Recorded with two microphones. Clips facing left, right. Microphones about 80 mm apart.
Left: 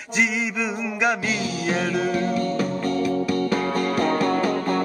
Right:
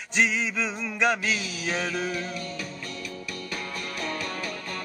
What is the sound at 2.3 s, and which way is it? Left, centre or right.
Music, left.